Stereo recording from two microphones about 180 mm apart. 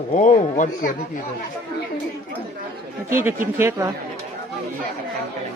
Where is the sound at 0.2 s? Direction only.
45° left (ahead or behind).